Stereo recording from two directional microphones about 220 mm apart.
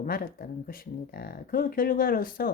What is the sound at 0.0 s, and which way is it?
Speech, 40° left (ahead or behind).